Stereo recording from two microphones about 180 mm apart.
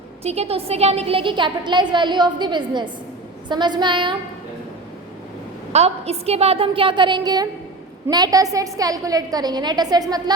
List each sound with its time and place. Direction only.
0.2 s a woman's voice: 35° right (ahead or behind)
5.7 s a woman's voice: 35° right (ahead or behind)